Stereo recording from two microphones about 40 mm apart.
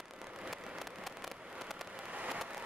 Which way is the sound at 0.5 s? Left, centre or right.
Centre.